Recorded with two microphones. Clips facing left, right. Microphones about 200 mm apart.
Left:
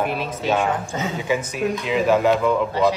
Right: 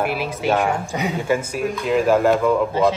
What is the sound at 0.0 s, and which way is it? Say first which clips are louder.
Speech: right 2 dB; 5° right (ahead or behind).